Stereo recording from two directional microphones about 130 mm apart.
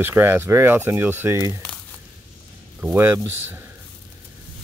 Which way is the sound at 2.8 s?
15° right (ahead or behind).